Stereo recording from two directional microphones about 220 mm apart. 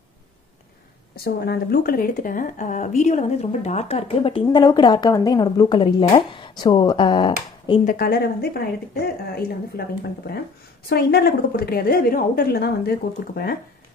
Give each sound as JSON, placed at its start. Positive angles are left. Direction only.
{"t": 1.1, "sound": "a woman's voice", "side_deg": 45}
{"t": 7.8, "sound": "speech", "side_deg": 40}